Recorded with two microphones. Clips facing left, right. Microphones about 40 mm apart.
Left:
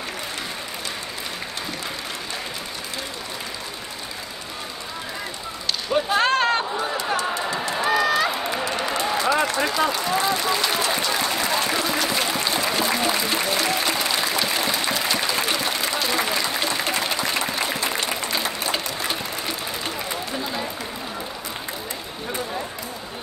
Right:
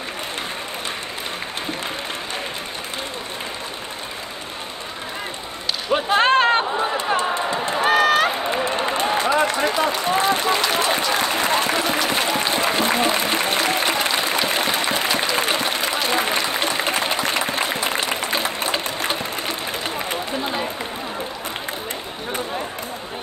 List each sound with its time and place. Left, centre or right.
5.9 s a sound: right
7.2 s run: right
8.6 s applause: right
9.6 s speech: right
10.9 s applause: right
18.4 s a sound: right
18.9 s sewing machine: right
20.1 s run: right